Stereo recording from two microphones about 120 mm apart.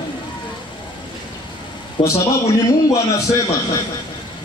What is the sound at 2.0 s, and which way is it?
Speech, 50° left (ahead or behind).